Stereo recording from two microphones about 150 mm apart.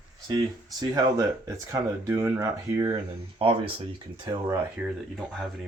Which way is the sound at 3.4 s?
40° right (ahead or behind).